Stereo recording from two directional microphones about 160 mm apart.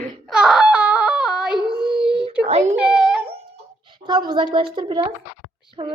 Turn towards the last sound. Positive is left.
turn(degrees=-30)  # may be behind; listen again after turning